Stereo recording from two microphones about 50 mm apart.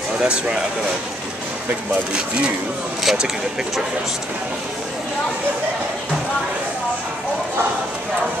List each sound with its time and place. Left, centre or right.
0.2 s speech: centre
2.1 s speech: right
3.0 s speech: centre